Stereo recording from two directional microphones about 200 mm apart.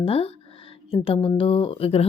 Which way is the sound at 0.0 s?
30° left (ahead or behind).